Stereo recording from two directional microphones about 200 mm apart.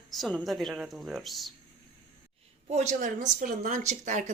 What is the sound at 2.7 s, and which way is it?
Speech, 35° right (ahead or behind).